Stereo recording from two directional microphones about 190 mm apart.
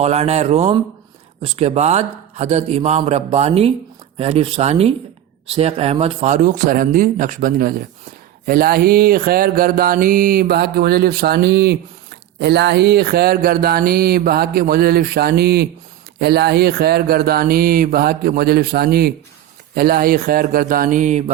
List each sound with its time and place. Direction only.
0.0 s a man's voice: 35° right (ahead or behind)
8.4 s mantra: 50° right (ahead or behind)
16.1 s speech: 60° right (ahead or behind)
19.7 s mantra: 50° right (ahead or behind)